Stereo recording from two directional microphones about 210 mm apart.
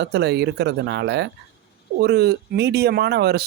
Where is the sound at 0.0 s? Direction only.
55° right (ahead or behind).